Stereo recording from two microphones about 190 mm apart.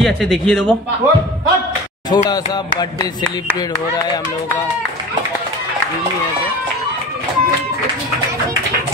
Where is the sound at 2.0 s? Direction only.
20° left (ahead or behind).